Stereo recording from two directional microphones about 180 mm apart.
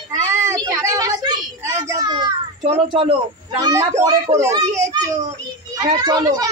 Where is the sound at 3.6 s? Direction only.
15° right (ahead or behind).